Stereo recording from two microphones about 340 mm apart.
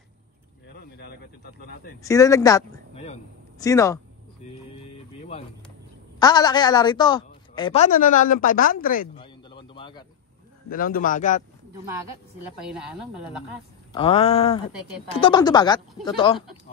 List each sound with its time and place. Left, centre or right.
0.7 s speech: left
2.0 s speech: centre
6.1 s a woman's voice: centre
10.7 s a man's voice: left
13.9 s a woman's voice: centre
15.9 s speech: centre